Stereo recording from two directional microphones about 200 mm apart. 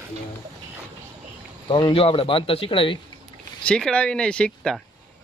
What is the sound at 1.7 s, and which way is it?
Speech, 25° left (ahead or behind).